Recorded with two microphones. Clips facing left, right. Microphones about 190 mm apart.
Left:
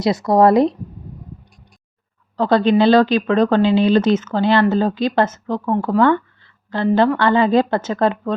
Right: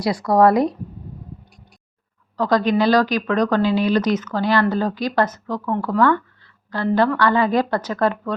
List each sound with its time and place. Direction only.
0.0 s a woman's voice: 20° left (ahead or behind)
2.3 s a woman's voice: 30° left (ahead or behind)